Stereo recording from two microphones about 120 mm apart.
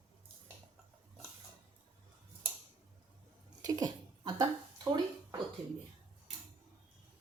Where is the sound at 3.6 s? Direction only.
30° right (ahead or behind).